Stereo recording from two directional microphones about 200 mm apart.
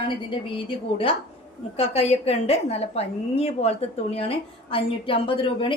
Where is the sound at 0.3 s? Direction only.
25° left (ahead or behind).